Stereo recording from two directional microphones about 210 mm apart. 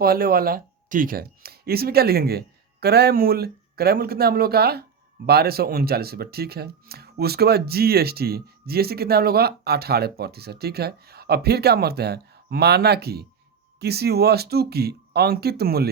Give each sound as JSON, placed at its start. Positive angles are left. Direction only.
{"t": 0.0, "sound": "speech", "side_deg": -45}